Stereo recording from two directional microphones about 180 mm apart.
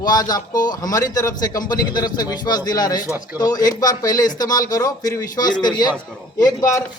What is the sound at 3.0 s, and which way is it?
Speech, 10° right (ahead or behind).